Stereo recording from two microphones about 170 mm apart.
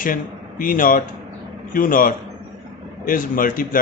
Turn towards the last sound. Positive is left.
turn(degrees=55)  # may be behind; listen again after turning